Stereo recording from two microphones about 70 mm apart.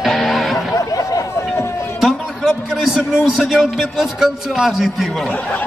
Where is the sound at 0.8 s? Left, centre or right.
Left.